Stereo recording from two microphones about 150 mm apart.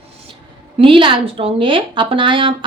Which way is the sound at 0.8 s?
35° right (ahead or behind).